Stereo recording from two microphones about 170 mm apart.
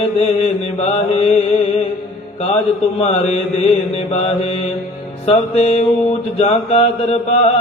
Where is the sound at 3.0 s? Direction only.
40° left (ahead or behind).